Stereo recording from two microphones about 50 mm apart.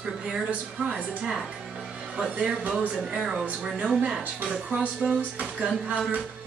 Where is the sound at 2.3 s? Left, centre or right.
Right.